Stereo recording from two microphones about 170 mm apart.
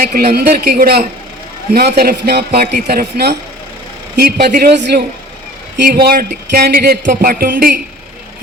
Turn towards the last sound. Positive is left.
turn(degrees=-60)  # may be behind; listen again after turning